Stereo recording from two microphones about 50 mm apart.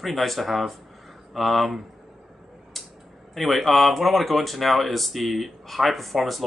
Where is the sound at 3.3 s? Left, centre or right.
Centre.